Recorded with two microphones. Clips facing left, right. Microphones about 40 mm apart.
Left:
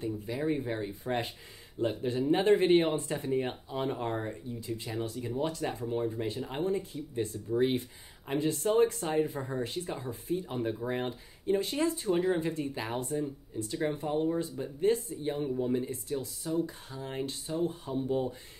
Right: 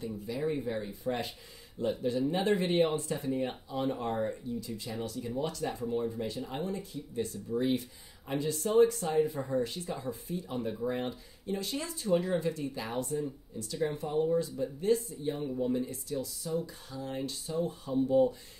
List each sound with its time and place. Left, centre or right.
0.4 s speech: left